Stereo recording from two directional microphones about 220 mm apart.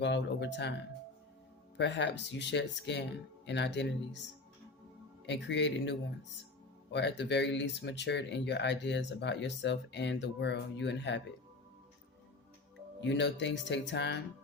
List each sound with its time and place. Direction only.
0.0 s speech: 50° left (ahead or behind)
1.8 s speech: 50° left (ahead or behind)
13.0 s speech: 55° left (ahead or behind)